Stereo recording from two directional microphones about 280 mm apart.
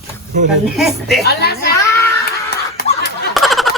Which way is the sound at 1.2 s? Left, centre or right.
Left.